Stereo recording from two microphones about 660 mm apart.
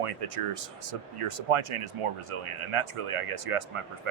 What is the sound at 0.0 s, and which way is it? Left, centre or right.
A man's voice, right.